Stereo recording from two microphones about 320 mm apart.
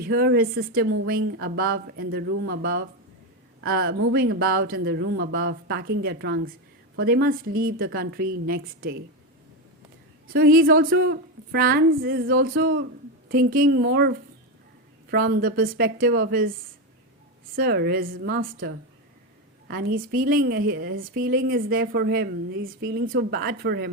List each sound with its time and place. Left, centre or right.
0.0 s a woman's voice: right
10.3 s a woman's voice: right
15.1 s a woman's voice: right